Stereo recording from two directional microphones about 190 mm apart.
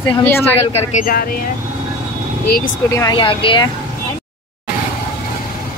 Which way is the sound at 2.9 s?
20° left (ahead or behind).